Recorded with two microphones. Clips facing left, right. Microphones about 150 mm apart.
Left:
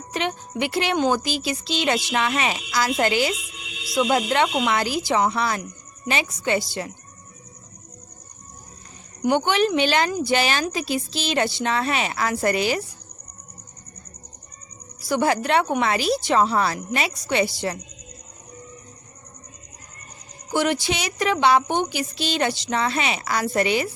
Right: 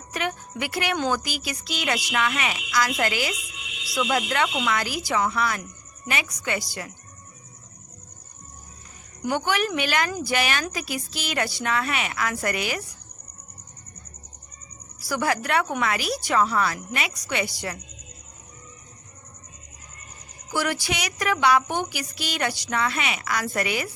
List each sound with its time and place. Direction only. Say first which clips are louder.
0.1 s a woman's voice: left 3 dB; 25° left (ahead or behind)
9.2 s a woman's voice: left 5 dB; 25° left (ahead or behind)
15.0 s a woman's voice: left 4 dB; 25° left (ahead or behind)
20.5 s a woman's voice: left 4 dB; 25° left (ahead or behind)